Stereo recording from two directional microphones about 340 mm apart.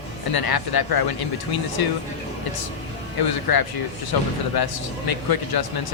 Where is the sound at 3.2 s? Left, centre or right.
Left.